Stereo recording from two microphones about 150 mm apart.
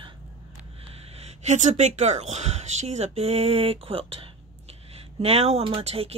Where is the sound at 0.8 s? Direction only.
45° right (ahead or behind).